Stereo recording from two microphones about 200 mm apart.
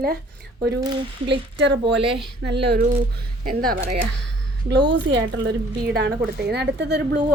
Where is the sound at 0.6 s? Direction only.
20° right (ahead or behind).